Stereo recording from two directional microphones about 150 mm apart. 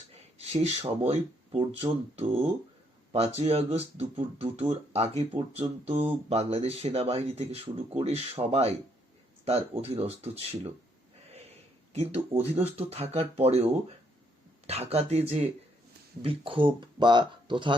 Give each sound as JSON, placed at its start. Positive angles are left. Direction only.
{"t": 0.1, "sound": "a sound", "side_deg": -45}
{"t": 0.9, "sound": "speech", "side_deg": -40}
{"t": 12.3, "sound": "speech", "side_deg": -40}
{"t": 14.7, "sound": "speech", "side_deg": -45}